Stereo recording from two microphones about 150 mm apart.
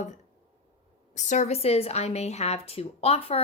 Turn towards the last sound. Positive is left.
turn(degrees=40)  # may be behind; listen again after turning